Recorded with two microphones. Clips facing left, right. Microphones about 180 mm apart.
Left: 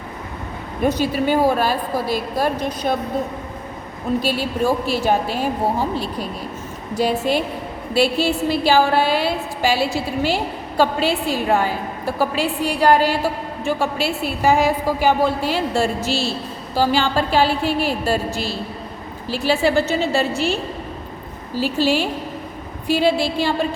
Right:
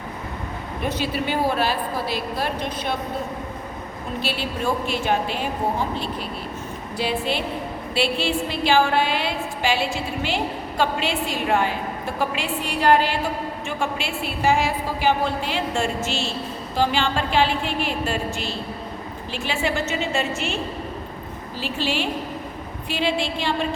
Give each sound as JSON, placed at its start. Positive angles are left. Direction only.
{"t": 0.9, "sound": "a woman's voice", "side_deg": 40}
{"t": 4.2, "sound": "a woman's voice", "side_deg": 45}
{"t": 6.9, "sound": "a woman's voice", "side_deg": 45}
{"t": 21.6, "sound": "a woman's voice", "side_deg": 40}